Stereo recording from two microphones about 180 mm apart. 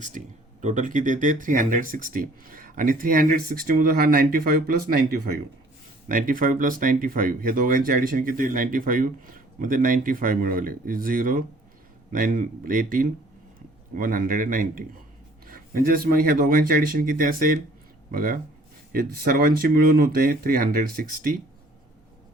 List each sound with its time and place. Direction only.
0.2 s speech: 45° right (ahead or behind)